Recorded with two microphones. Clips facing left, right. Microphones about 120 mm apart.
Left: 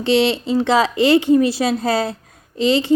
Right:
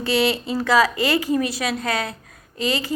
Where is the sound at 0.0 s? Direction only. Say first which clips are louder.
Left 4 dB; 25° left (ahead or behind).